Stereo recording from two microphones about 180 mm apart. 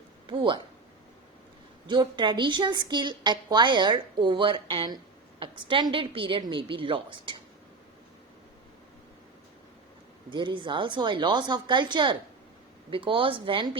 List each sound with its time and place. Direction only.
0.3 s a woman's voice: 25° right (ahead or behind)
1.9 s a woman's voice: 25° right (ahead or behind)
10.2 s a woman's voice: 25° right (ahead or behind)